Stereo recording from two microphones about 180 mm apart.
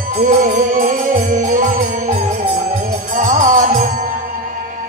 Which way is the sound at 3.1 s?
45° right (ahead or behind).